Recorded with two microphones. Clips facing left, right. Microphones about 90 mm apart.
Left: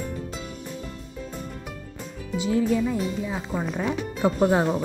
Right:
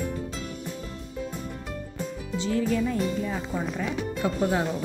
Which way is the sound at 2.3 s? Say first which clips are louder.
Left 3 dB; 15° left (ahead or behind).